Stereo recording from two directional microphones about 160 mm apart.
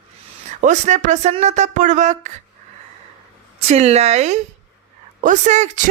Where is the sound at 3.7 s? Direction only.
45° right (ahead or behind).